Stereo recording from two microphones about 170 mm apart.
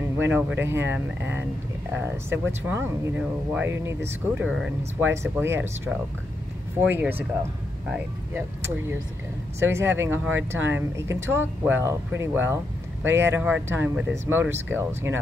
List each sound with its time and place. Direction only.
0.2 s speech: 10° right (ahead or behind)
6.8 s speech: 10° right (ahead or behind)